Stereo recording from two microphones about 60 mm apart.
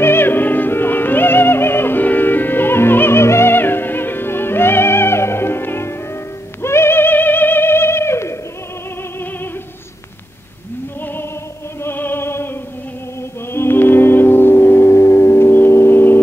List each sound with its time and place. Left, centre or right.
0.0 s music: left
11.8 s opera: left
13.5 s music: left